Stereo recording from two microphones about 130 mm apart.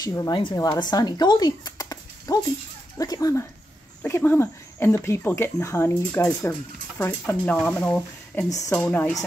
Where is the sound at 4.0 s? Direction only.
15° left (ahead or behind).